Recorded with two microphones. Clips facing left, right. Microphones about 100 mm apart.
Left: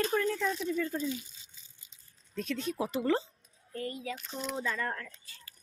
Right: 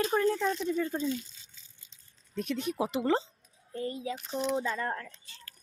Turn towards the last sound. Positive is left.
turn(degrees=-25)  # may be behind; listen again after turning